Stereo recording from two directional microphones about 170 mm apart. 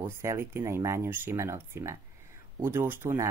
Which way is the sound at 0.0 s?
15° right (ahead or behind).